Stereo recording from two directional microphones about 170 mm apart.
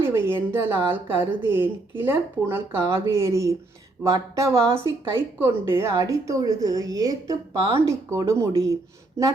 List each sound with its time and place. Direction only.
0.3 s a woman's voice: 15° right (ahead or behind)